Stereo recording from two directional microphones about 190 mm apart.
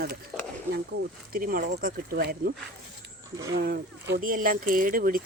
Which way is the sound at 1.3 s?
50° right (ahead or behind).